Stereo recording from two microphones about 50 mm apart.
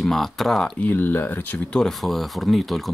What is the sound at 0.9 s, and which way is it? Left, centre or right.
Speech, left.